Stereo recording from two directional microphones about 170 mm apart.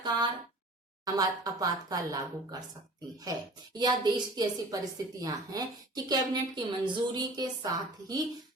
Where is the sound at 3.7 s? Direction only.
25° right (ahead or behind).